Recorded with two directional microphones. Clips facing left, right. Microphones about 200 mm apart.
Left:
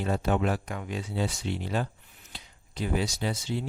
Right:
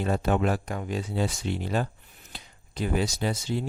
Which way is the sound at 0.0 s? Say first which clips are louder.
Right 2 dB; 50° right (ahead or behind).